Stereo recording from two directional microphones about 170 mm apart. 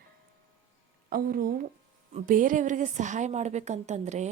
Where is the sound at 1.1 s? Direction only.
55° right (ahead or behind).